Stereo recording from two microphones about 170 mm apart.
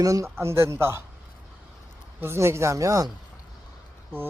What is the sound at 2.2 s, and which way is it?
Speech, 15° right (ahead or behind).